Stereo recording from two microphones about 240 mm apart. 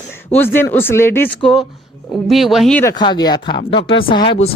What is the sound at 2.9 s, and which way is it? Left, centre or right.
Speech, centre.